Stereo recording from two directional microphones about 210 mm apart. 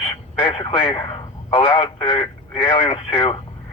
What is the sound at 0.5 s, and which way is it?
Speech, 25° left (ahead or behind).